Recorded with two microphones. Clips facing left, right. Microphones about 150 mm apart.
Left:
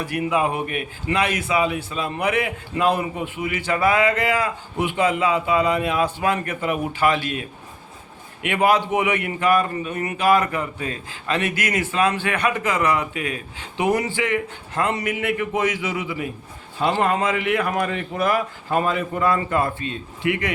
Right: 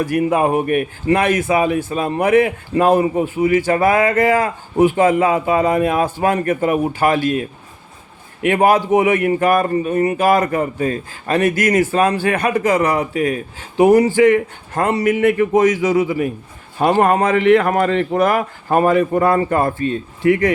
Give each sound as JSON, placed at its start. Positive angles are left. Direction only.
{"t": 0.0, "sound": "a man's voice", "side_deg": -45}